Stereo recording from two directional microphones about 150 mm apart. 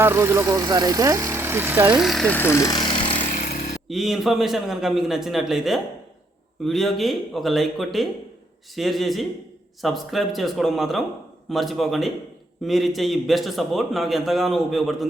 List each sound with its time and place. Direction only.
0.0 s speech: 15° right (ahead or behind)
2.0 s speech: 5° left (ahead or behind); by 3.2 s 35° left (ahead or behind)
3.2 s vehicle: 65° left (ahead or behind)
3.8 s a man's voice: centre (ahead or behind)